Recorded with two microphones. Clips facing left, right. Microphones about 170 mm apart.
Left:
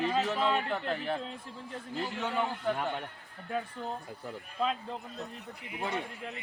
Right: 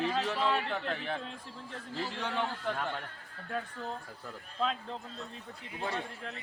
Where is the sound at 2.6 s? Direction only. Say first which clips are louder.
Left 3 dB; 15° left (ahead or behind).